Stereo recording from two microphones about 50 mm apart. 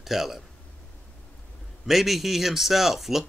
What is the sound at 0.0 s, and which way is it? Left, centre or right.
Speech, centre.